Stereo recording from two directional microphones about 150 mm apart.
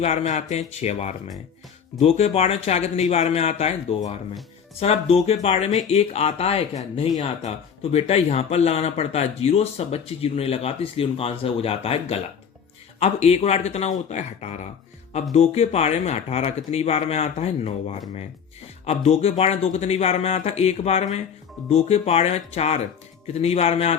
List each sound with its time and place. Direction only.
0.0 s speech: 45° left (ahead or behind)